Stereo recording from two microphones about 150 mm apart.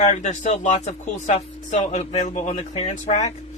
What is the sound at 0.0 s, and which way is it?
Speech, 50° left (ahead or behind).